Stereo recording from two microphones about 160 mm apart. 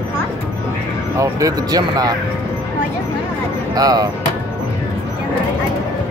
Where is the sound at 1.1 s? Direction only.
20° right (ahead or behind).